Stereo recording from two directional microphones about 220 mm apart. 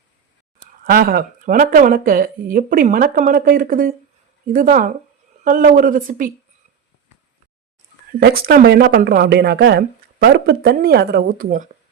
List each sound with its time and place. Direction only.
0.9 s speech: 40° right (ahead or behind)
8.2 s speech: 45° right (ahead or behind)